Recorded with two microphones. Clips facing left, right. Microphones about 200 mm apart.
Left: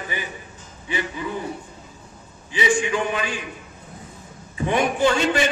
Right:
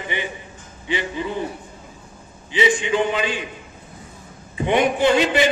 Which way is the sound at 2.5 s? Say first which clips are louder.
Right 2 dB; 25° right (ahead or behind).